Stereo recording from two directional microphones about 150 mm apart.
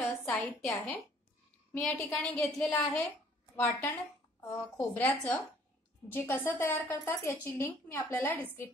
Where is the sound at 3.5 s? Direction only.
20° left (ahead or behind).